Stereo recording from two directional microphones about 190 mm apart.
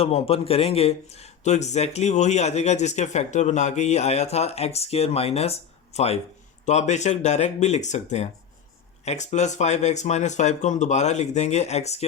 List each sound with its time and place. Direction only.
0.0 s a man's voice: 30° left (ahead or behind)